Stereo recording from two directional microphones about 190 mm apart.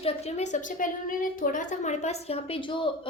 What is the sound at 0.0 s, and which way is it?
A woman's voice, 35° left (ahead or behind).